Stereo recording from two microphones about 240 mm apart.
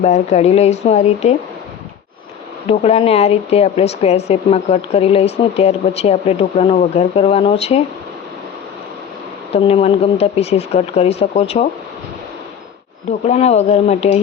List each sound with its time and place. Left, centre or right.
0.0 s speech: left
2.6 s speech: left
9.5 s speech: left
13.2 s speech: left